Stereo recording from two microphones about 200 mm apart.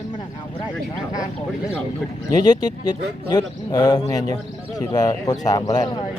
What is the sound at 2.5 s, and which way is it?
Speech, 20° left (ahead or behind).